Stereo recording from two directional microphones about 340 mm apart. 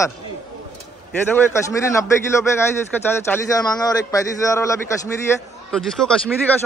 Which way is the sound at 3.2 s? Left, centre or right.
Centre.